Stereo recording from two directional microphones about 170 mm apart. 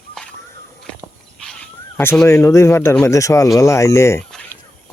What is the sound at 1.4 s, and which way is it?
Speech, 5° left (ahead or behind).